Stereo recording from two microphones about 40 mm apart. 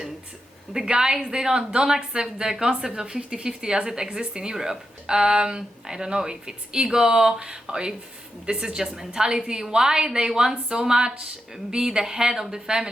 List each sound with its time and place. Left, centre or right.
0.7 s a woman's voice: centre